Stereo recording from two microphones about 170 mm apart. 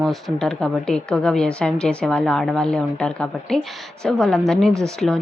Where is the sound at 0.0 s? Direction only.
Centre (ahead or behind).